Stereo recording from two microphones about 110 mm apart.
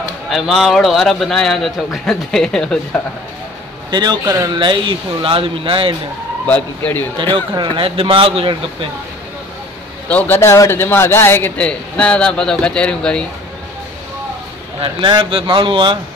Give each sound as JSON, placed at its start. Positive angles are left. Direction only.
{"t": 0.3, "sound": "a man's voice", "side_deg": 0}
{"t": 3.9, "sound": "a man's voice", "side_deg": -40}
{"t": 4.2, "sound": "speech", "side_deg": -30}
{"t": 4.6, "sound": "speech", "side_deg": -45}
{"t": 6.4, "sound": "a man's voice", "side_deg": 15}
{"t": 7.2, "sound": "a man's voice", "side_deg": -45}
{"t": 10.0, "sound": "a man's voice", "side_deg": 15}
{"t": 14.8, "sound": "a man's voice", "side_deg": -50}